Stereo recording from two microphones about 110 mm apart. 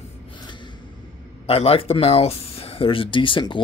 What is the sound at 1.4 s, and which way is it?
Speech, 60° left (ahead or behind).